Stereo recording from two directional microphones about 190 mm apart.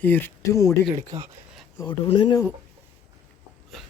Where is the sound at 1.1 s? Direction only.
20° right (ahead or behind).